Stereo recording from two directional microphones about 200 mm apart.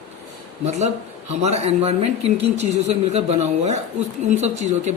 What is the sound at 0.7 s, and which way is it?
Speech, 35° right (ahead or behind).